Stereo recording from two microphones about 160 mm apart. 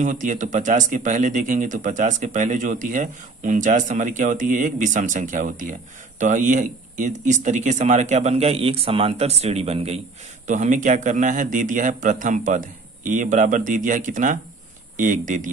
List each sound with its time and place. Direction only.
0.0 s speech: 55° right (ahead or behind)